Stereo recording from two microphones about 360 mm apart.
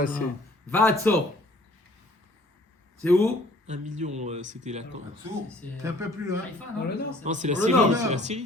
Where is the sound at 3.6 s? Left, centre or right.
Centre.